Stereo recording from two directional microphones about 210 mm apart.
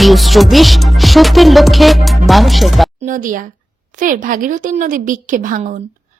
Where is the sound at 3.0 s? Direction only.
40° right (ahead or behind).